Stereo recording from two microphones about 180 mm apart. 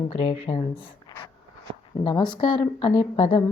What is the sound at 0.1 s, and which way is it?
Speech, 35° left (ahead or behind).